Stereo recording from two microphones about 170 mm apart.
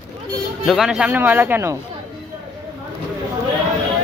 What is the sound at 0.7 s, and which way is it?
Speech, 5° right (ahead or behind).